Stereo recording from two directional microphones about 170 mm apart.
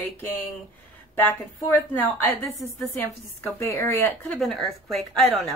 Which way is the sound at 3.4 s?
15° left (ahead or behind).